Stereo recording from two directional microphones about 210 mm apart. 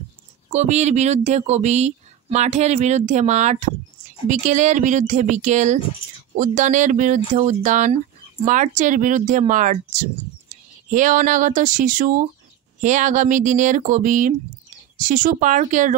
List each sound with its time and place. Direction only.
0.5 s speech: 35° right (ahead or behind)